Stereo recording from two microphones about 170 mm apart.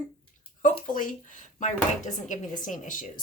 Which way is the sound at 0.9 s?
50° left (ahead or behind).